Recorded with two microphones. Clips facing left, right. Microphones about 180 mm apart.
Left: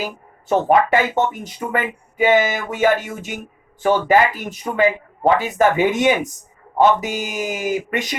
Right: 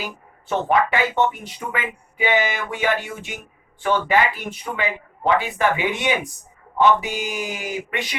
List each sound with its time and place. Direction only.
0.0 s speech: 40° left (ahead or behind)